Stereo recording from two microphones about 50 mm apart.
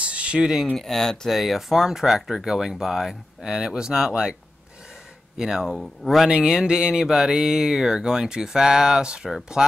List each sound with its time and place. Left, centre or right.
0.0 s a sound: right
0.7 s speech: centre
1.3 s speech: centre
5.4 s speech: centre
6.3 s speech: centre